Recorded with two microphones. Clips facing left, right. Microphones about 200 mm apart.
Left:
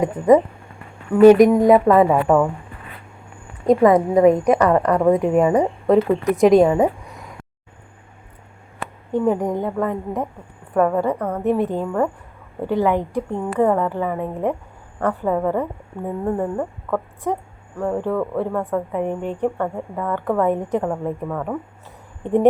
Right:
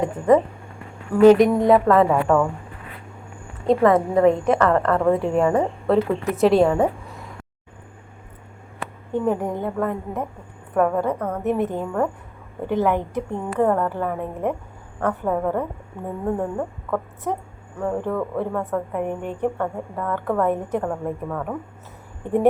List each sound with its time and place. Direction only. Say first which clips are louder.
0.0 s a woman's voice: left 3 dB; 15° left (ahead or behind)
3.7 s a woman's voice: left 3 dB; 15° left (ahead or behind)
9.1 s a woman's voice: left 3 dB; 15° left (ahead or behind)
10.8 s a woman's voice: left 2 dB; centre (ahead or behind)
11.6 s a woman's voice: left 2 dB; 15° left (ahead or behind)
15.3 s a woman's voice: left 3 dB; 5° left (ahead or behind)
17.7 s a woman's voice: left 2 dB; 10° left (ahead or behind); by 19.5 s 10° right (ahead or behind)
19.5 s a woman's voice: left 2 dB; 5° left (ahead or behind)